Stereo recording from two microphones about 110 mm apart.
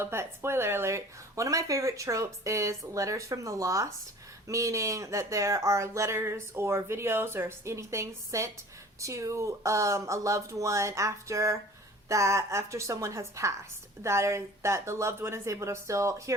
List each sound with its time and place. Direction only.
0.0 s speech: 25° right (ahead or behind)